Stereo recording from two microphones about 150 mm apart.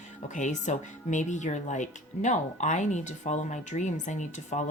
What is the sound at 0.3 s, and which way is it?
Speech, 55° left (ahead or behind).